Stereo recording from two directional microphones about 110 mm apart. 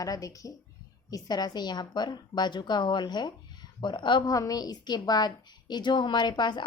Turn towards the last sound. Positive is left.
turn(degrees=45)  # may be behind; listen again after turning